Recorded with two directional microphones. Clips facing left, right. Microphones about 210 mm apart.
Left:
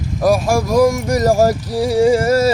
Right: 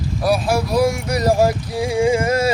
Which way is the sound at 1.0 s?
45° left (ahead or behind).